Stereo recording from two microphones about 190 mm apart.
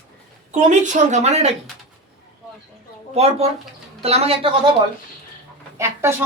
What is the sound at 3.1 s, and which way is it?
A woman's voice, 35° right (ahead or behind).